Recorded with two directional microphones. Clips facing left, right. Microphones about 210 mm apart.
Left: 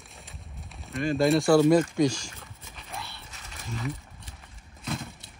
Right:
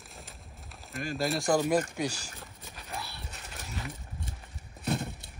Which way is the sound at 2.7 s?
5° right (ahead or behind).